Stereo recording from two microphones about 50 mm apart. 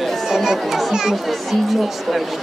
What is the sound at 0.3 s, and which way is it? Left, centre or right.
Speech, centre.